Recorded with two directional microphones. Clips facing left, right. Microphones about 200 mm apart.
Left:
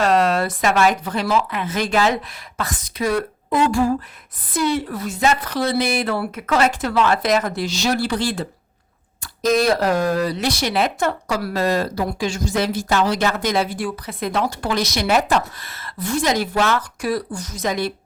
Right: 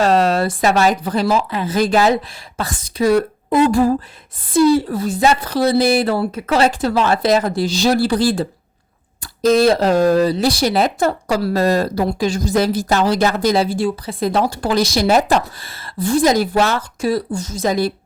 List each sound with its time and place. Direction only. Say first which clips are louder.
0.0 s speech: right 3 dB; 35° right (ahead or behind)